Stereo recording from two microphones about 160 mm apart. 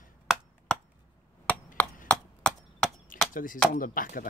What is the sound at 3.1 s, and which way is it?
Chop, 60° left (ahead or behind).